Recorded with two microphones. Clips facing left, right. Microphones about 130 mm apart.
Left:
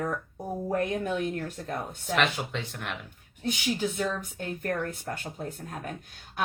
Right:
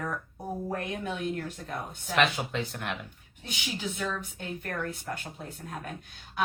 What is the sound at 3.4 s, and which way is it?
A woman's voice, 45° left (ahead or behind).